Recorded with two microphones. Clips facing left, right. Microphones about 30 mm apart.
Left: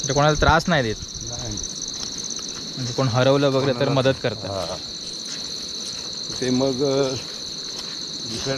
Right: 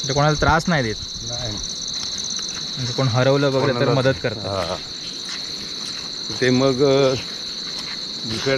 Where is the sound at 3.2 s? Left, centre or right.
Centre.